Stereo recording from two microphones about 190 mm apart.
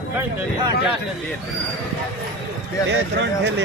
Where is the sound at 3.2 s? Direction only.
65° right (ahead or behind).